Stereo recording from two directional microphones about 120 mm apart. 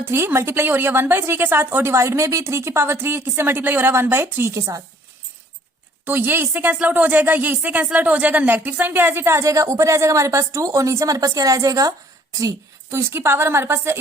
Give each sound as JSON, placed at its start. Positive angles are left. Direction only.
{"t": 0.0, "sound": "speech", "side_deg": -20}
{"t": 6.1, "sound": "speech", "side_deg": -15}